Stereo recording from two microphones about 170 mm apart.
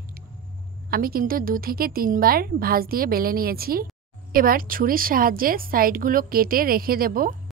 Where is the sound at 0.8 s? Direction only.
60° right (ahead or behind).